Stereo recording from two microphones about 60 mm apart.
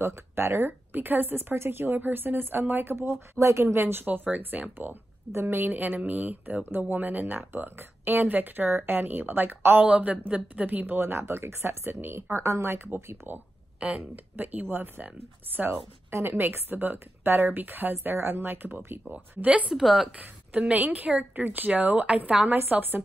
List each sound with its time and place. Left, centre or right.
0.0 s speech: right
3.3 s speech: right
4.0 s speech: right
5.3 s speech: right
5.8 s speech: right
9.8 s speech: right
11.0 s speech: right
13.7 s speech: centre
14.1 s speech: right
15.7 s speech: right
19.0 s speech: right
19.7 s a woman's voice: centre
20.2 s a woman's voice: right